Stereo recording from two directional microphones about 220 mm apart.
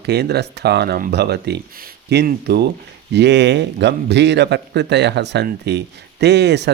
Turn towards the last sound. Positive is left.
turn(degrees=-50)  # may be behind; listen again after turning